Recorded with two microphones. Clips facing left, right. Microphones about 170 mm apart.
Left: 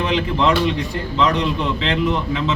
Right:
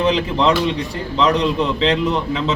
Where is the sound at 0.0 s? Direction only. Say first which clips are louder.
Right 2 dB; 35° right (ahead or behind).